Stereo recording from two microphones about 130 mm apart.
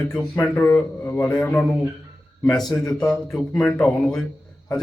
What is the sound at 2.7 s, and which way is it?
Speech, 30° left (ahead or behind).